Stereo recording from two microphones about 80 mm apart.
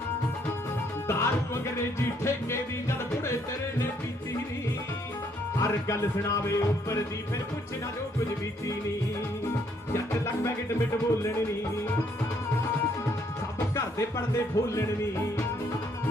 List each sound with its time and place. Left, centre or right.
1.0 s music: left
5.5 s music: left
9.9 s music: left
13.7 s speech: left